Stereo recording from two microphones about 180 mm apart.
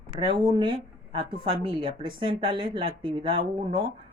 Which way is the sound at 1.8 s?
25° right (ahead or behind).